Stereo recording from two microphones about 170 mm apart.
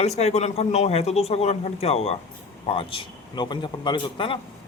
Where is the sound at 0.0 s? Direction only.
40° left (ahead or behind).